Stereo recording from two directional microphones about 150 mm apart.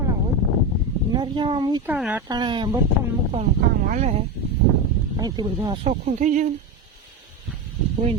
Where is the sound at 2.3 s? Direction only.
30° right (ahead or behind).